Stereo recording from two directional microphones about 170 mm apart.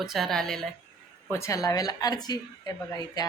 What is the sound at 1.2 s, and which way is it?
A woman's voice, 15° left (ahead or behind).